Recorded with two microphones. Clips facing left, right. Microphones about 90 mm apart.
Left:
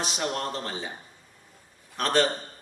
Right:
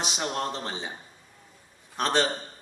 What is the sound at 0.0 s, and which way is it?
Speech, 20° right (ahead or behind).